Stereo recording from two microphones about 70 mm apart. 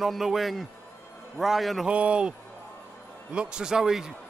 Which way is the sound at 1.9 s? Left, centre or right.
Centre.